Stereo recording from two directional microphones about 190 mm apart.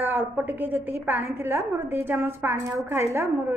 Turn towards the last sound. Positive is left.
turn(degrees=-15)  # may be behind; listen again after turning